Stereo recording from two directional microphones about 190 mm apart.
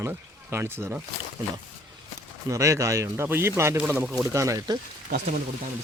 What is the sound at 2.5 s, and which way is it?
Speech, 15° right (ahead or behind).